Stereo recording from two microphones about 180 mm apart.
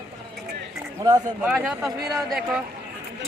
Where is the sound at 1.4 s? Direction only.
5° right (ahead or behind).